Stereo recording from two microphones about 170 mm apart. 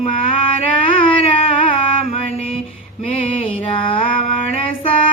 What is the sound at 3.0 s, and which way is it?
Music, 30° left (ahead or behind).